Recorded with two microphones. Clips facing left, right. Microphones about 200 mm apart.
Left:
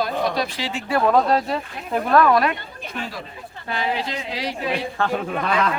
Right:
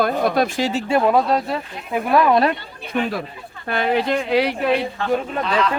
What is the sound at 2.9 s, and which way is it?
A man's voice, 55° right (ahead or behind).